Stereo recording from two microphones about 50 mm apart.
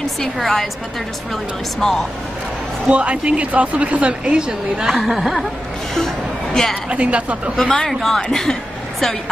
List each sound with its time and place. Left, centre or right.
0.4 s speech: centre
2.9 s a woman's voice: right; by 5.5 s centre
5.9 s music: centre
6.9 s a woman's voice: right
7.6 s speech: centre